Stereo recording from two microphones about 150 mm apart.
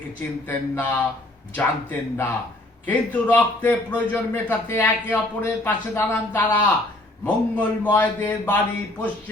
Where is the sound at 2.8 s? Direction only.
10° left (ahead or behind).